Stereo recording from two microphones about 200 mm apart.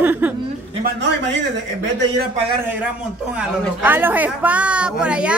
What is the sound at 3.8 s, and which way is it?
A woman's voice, 10° right (ahead or behind).